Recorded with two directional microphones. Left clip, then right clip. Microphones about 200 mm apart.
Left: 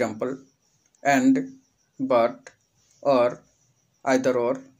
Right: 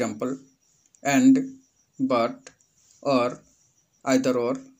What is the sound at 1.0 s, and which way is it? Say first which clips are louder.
Speech: even; 35° right (ahead or behind).